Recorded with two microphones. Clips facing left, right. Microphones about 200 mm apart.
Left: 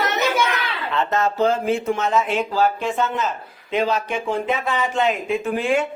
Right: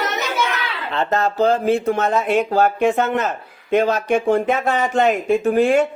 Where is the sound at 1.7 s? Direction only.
60° right (ahead or behind).